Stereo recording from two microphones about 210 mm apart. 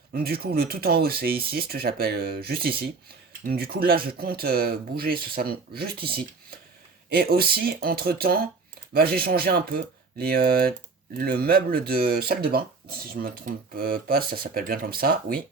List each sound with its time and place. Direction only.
0.1 s speech: 45° right (ahead or behind)
7.1 s speech: 45° right (ahead or behind)